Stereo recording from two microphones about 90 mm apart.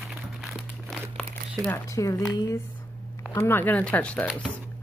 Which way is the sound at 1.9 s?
40° left (ahead or behind).